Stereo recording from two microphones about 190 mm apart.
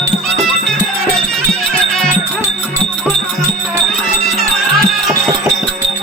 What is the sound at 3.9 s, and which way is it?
Music, centre (ahead or behind).